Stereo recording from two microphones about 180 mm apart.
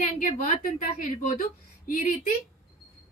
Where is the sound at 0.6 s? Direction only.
50° left (ahead or behind).